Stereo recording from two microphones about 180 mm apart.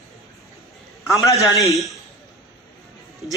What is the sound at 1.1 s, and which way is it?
Speech, 15° left (ahead or behind).